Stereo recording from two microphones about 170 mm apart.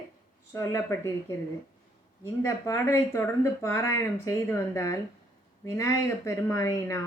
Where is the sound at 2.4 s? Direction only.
15° left (ahead or behind).